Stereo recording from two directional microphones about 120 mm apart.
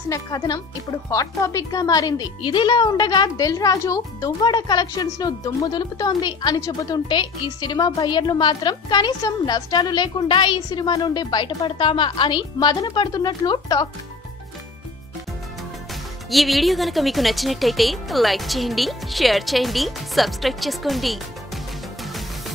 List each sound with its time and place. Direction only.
0.1 s speech: 30° left (ahead or behind)
15.9 s speech: centre (ahead or behind)